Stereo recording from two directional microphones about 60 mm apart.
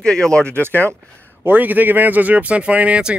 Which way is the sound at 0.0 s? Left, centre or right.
Centre.